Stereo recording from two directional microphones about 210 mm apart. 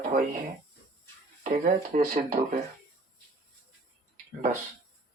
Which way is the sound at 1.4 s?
40° right (ahead or behind).